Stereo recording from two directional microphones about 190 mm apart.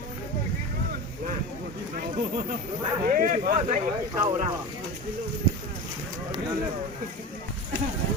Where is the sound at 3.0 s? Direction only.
45° right (ahead or behind).